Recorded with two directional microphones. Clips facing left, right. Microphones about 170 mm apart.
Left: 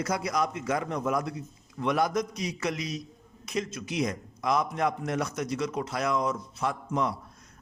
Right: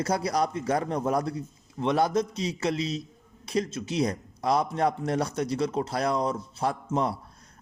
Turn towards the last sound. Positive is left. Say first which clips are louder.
# right 2 dB
turn(degrees=-35)  # may be behind; listen again after turning